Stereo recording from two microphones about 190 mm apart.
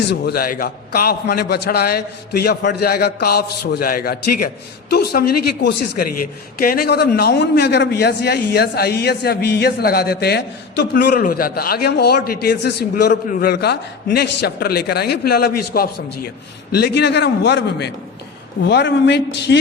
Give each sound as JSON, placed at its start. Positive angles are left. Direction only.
{"t": 0.1, "sound": "a man's voice", "side_deg": 55}